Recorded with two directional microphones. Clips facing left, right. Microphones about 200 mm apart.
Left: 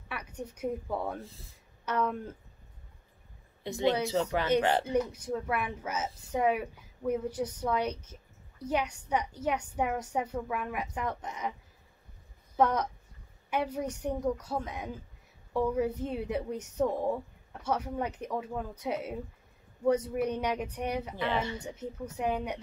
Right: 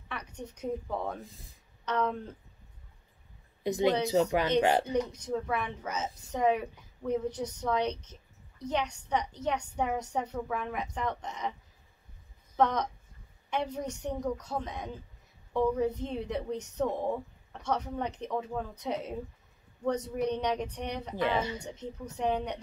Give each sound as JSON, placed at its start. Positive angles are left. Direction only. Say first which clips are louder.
{"t": 0.1, "sound": "a woman's voice", "louder": "left 1 dB", "side_deg": 10}
{"t": 4.0, "sound": "speech", "louder": "right 3 dB", "side_deg": -15}
{"t": 4.9, "sound": "a woman's voice", "louder": "left 1 dB", "side_deg": 5}
{"t": 12.5, "sound": "a woman's voice", "louder": "left 1 dB", "side_deg": 10}
{"t": 21.1, "sound": "speech", "louder": "right 2 dB", "side_deg": -15}
{"t": 21.7, "sound": "a woman's voice", "louder": "left 1 dB", "side_deg": 10}